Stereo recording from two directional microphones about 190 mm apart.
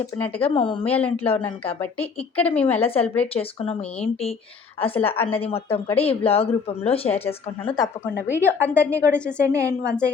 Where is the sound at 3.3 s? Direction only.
30° left (ahead or behind).